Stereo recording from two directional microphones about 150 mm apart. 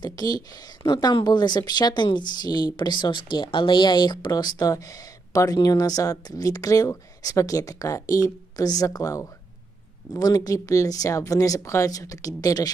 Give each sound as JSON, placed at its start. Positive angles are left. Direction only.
{"t": 0.0, "sound": "speech", "side_deg": 25}